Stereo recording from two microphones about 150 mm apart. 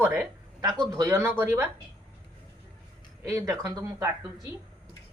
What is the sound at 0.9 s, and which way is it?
Speech, 20° right (ahead or behind).